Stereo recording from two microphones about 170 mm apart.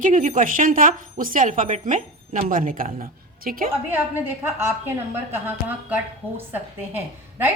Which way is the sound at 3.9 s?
10° right (ahead or behind).